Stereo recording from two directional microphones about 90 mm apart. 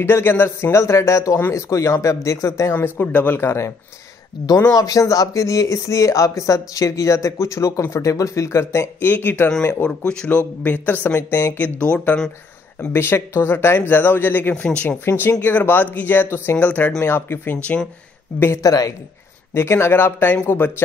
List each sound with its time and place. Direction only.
0.0 s speech: 25° left (ahead or behind)
12.8 s speech: 25° left (ahead or behind)
15.0 s speech: 25° left (ahead or behind)
17.6 s speech: 15° left (ahead or behind)
18.6 s speech: 40° left (ahead or behind)
19.5 s speech: 30° left (ahead or behind)